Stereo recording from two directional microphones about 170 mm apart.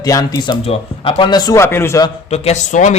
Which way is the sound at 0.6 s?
35° left (ahead or behind).